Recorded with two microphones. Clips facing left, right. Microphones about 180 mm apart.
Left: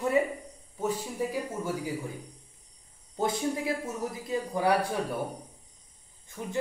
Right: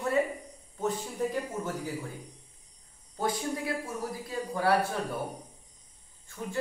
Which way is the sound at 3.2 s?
25° left (ahead or behind).